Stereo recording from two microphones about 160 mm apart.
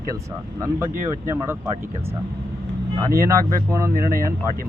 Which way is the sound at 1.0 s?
15° right (ahead or behind).